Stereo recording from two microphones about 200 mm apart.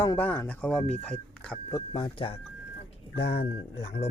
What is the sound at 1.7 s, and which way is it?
Speech, 20° left (ahead or behind).